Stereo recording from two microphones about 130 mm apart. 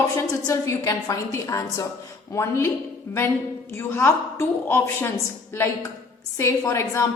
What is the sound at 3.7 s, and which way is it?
A woman's voice, 20° left (ahead or behind).